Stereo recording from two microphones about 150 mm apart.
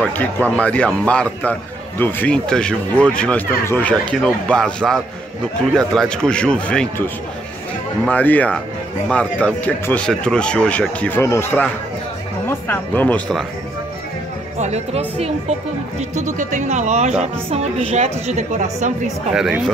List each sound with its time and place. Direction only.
0.0 s a man's voice: 10° left (ahead or behind)
8.1 s a man's voice: 10° left (ahead or behind)
14.6 s a woman's voice: 45° right (ahead or behind)
17.5 s a woman's voice: 40° right (ahead or behind)
19.0 s speech: 5° right (ahead or behind)